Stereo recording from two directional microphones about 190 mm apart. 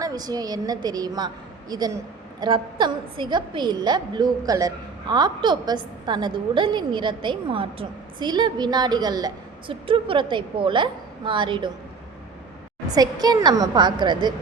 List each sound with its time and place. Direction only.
0.0 s a woman's voice: 20° right (ahead or behind)
12.9 s a woman's voice: 20° right (ahead or behind)